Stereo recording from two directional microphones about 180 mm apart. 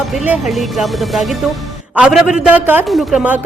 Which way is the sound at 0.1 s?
Centre (ahead or behind).